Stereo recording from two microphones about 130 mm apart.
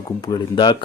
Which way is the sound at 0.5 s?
35° left (ahead or behind).